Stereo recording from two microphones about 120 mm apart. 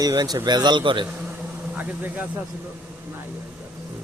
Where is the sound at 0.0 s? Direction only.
35° right (ahead or behind).